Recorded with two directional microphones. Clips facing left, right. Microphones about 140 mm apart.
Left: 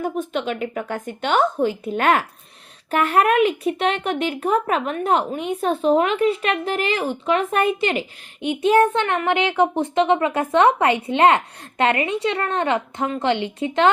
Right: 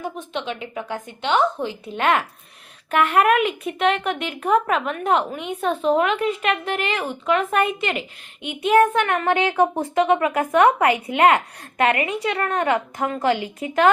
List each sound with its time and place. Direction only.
0.0 s a woman's voice: 45° left (ahead or behind); by 13.9 s 25° left (ahead or behind)